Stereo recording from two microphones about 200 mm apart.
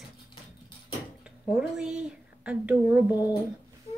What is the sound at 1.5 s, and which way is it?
Speech, 5° right (ahead or behind).